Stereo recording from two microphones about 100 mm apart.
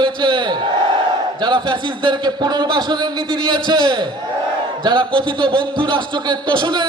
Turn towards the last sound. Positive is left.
turn(degrees=-50)  # may be behind; listen again after turning